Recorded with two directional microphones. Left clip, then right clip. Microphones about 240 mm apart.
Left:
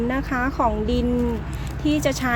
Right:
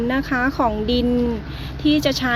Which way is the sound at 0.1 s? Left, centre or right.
Centre.